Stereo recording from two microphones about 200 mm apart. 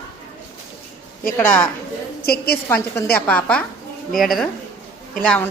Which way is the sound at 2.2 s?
50° left (ahead or behind).